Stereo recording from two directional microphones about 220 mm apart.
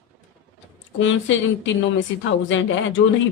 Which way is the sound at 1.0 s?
60° left (ahead or behind).